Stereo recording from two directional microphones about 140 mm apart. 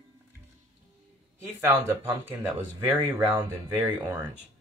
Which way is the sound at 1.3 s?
20° right (ahead or behind).